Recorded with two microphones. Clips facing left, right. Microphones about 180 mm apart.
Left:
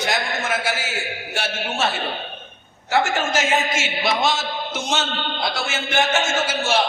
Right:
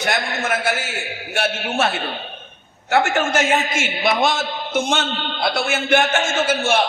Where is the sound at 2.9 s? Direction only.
55° right (ahead or behind).